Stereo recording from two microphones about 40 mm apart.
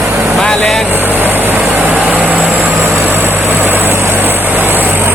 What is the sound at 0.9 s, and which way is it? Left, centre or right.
Vehicle, right.